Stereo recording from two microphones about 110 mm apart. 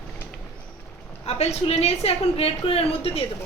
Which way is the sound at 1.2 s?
70° left (ahead or behind).